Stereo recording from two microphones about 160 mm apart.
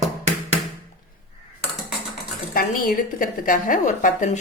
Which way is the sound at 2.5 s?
65° left (ahead or behind).